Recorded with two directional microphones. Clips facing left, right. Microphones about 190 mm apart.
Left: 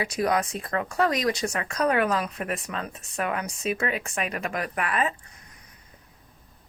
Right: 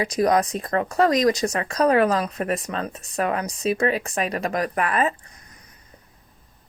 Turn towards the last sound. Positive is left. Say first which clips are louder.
# right 5 dB
turn(degrees=-40)  # may be behind; listen again after turning